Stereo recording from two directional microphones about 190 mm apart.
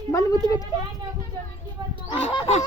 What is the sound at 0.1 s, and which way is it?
Speech, 20° left (ahead or behind).